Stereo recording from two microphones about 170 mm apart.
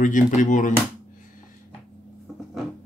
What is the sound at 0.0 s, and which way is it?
Speech, 50° left (ahead or behind).